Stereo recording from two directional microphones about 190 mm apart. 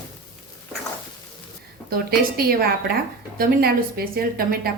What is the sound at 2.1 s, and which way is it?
A woman's voice, 55° right (ahead or behind).